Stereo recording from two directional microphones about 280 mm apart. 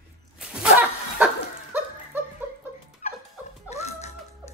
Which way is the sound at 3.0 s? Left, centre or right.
Left.